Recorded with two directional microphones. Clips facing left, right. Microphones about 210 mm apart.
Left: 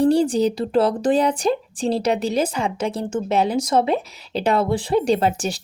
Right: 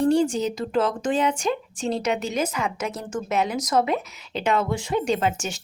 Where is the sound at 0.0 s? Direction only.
35° left (ahead or behind).